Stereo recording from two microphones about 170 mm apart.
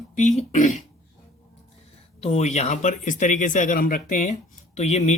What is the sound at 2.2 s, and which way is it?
Speech, 40° left (ahead or behind).